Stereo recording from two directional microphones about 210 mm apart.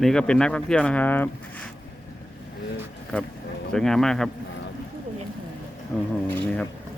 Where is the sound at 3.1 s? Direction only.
5° left (ahead or behind).